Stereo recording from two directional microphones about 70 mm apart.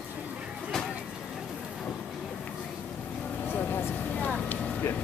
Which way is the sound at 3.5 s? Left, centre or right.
Left.